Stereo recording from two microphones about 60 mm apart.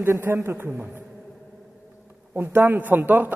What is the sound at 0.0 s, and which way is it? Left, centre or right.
Speech, right.